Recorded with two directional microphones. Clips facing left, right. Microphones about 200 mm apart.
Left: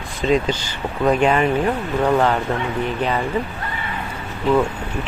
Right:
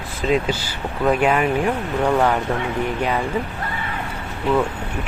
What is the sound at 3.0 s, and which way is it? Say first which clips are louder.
Speech: left 1 dB; 10° right (ahead or behind).